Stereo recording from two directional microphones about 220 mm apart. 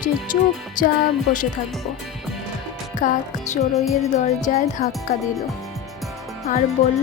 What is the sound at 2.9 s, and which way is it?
Speech, 35° left (ahead or behind).